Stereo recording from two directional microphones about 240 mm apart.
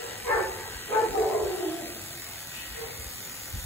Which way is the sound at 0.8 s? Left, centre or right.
Centre.